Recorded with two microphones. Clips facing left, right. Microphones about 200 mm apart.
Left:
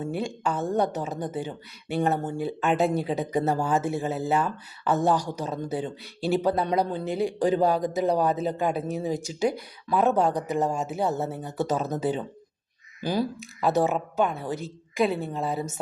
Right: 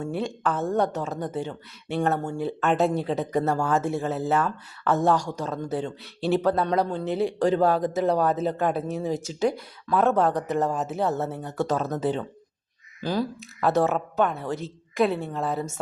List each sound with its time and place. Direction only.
0.0 s speech: centre (ahead or behind)
3.3 s speech: 20° left (ahead or behind)
3.7 s speech: centre (ahead or behind)